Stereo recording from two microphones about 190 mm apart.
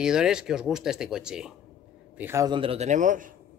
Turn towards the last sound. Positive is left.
turn(degrees=-45)  # may be behind; listen again after turning